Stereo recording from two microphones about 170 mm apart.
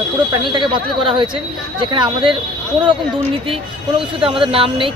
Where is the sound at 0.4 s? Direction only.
30° right (ahead or behind).